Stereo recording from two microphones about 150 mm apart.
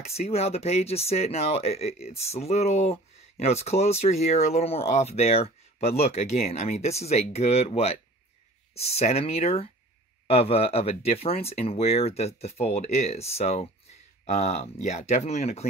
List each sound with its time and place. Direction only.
0.0 s speech: 45° left (ahead or behind)